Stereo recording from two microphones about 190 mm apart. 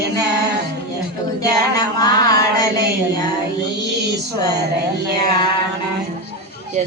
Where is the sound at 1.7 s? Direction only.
20° left (ahead or behind).